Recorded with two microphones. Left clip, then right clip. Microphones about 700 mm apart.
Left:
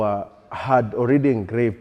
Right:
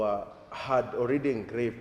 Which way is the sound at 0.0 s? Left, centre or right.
Left.